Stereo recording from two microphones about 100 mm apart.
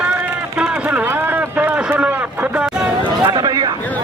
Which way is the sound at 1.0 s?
20° right (ahead or behind).